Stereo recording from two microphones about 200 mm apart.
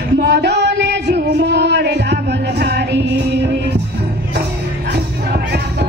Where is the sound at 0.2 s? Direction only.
55° right (ahead or behind).